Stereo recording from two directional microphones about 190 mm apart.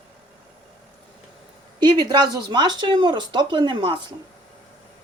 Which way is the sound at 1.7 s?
20° right (ahead or behind).